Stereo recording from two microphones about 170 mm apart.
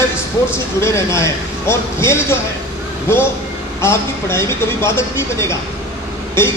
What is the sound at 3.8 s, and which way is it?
Speech, 15° left (ahead or behind).